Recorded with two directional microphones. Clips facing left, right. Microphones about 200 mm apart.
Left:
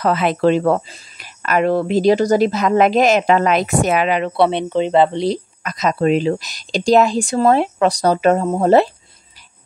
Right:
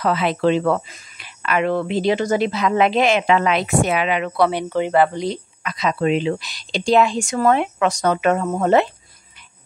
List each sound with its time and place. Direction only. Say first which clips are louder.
0.0 s speech: left 3 dB; 45° left (ahead or behind); by 5.2 s 20° left (ahead or behind)
5.2 s speech: left 5 dB; 40° left (ahead or behind)